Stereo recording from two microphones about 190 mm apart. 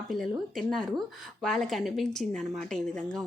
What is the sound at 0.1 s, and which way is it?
Speech, centre (ahead or behind).